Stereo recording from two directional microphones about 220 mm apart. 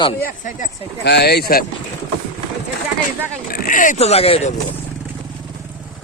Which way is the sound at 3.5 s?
35° left (ahead or behind).